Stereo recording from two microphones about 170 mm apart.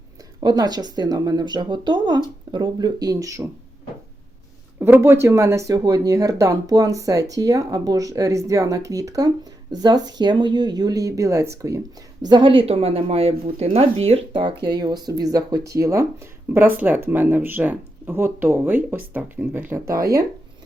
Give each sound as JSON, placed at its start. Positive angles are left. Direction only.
{"t": 0.3, "sound": "a woman's voice", "side_deg": -25}
{"t": 4.8, "sound": "a woman's voice", "side_deg": -15}